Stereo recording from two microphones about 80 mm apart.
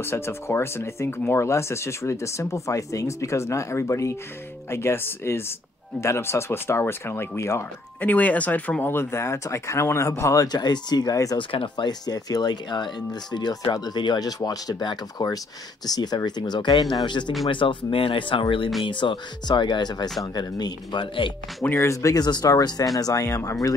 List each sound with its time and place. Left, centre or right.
0.0 s speech: left
8.0 s speech: left
11.3 s speech: left
17.0 s speech: left
17.5 s speech: left
21.6 s speech: left
22.2 s speech: left